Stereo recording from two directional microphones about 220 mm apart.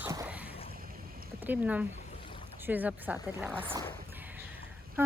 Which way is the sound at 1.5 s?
5° right (ahead or behind).